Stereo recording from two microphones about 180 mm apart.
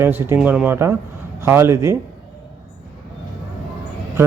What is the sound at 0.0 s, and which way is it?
Speech, 10° right (ahead or behind).